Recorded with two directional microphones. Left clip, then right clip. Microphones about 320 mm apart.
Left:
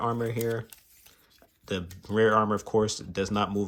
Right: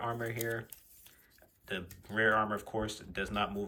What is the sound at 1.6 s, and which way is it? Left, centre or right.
Speech, centre.